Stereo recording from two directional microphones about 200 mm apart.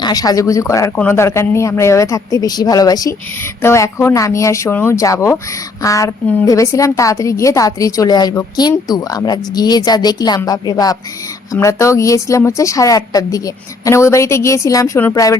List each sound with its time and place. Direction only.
0.0 s a woman's voice: 20° left (ahead or behind)